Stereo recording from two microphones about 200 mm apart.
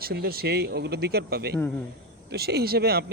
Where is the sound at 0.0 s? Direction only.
50° right (ahead or behind).